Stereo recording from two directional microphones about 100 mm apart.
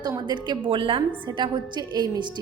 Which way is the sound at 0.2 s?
45° right (ahead or behind).